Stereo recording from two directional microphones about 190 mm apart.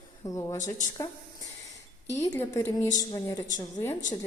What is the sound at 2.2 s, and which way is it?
A woman's voice, 15° left (ahead or behind).